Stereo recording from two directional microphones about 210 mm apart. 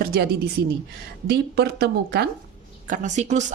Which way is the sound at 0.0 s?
45° right (ahead or behind).